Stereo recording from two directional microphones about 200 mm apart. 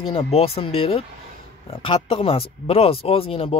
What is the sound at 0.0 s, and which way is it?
Speech, 25° left (ahead or behind).